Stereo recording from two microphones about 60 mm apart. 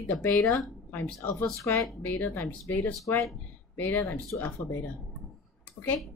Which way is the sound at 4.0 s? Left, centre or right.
Left.